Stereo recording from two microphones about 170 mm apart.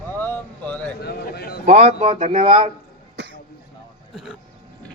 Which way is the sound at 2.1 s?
55° right (ahead or behind).